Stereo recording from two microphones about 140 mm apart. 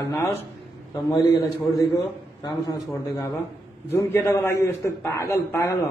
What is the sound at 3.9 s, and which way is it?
A man's voice, 20° left (ahead or behind).